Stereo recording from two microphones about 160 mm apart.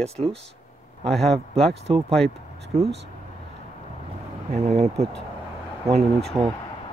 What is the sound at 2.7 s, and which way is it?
Speech, 40° right (ahead or behind).